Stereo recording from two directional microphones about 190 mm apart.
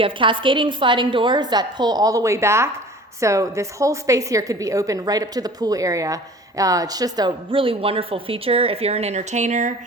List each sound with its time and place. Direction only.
0.0 s a woman's voice: 25° right (ahead or behind)